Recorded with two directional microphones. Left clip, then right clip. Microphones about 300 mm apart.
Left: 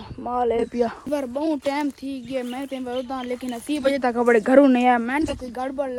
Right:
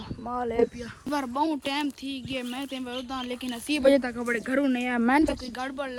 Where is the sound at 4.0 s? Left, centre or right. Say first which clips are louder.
Left 11 dB; centre.